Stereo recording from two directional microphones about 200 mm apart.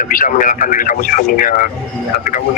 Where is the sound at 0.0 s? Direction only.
40° left (ahead or behind).